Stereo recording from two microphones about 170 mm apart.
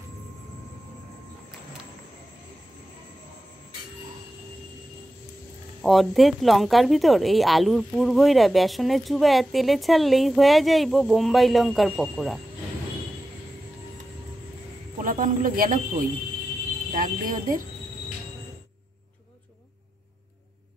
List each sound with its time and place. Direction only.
5.8 s speech: centre (ahead or behind)
15.0 s speech: 50° right (ahead or behind)